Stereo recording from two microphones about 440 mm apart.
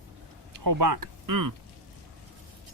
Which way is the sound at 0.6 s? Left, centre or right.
Right.